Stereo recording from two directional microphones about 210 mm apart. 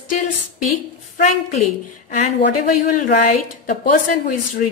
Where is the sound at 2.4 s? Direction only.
45° left (ahead or behind).